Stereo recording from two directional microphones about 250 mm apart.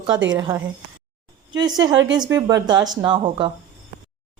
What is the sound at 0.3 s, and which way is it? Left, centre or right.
Speech, centre.